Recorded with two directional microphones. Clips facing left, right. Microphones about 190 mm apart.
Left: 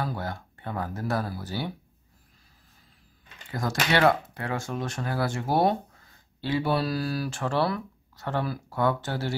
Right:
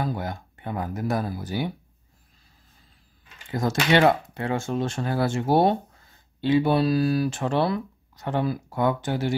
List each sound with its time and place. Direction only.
0.0 s speech: 15° right (ahead or behind)
3.4 s speech: 20° right (ahead or behind)